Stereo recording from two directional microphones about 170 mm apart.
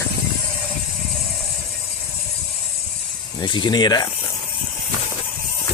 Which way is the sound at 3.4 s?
25° left (ahead or behind).